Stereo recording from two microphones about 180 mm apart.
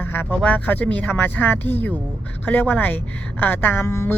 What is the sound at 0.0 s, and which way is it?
Speech, 10° left (ahead or behind).